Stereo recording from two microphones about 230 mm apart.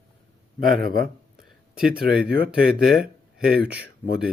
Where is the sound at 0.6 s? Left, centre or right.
Right.